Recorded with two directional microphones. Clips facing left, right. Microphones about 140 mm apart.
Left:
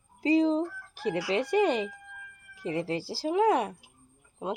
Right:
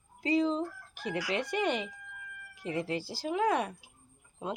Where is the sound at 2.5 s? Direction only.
30° left (ahead or behind).